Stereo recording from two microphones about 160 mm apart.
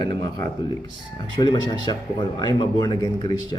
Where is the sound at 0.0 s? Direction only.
25° left (ahead or behind).